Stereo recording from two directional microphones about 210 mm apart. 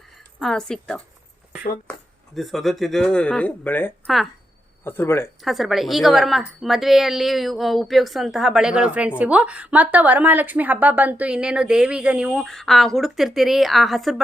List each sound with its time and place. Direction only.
0.3 s a woman's voice: 5° left (ahead or behind)
5.4 s a woman's voice: centre (ahead or behind)